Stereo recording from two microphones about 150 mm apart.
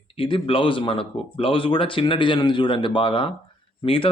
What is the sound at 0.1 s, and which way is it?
Speech, 35° left (ahead or behind).